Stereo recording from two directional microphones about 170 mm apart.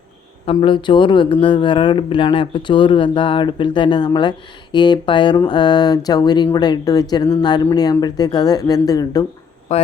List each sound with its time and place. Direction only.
0.5 s speech: 30° left (ahead or behind)
9.7 s speech: 40° left (ahead or behind)